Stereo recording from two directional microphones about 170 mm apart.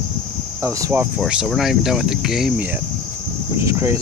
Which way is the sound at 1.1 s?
5° right (ahead or behind).